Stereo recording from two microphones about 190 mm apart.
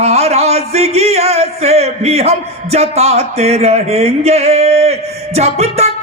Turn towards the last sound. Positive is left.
turn(degrees=-35)  # may be behind; listen again after turning